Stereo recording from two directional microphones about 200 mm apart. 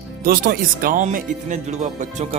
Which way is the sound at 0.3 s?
45° right (ahead or behind).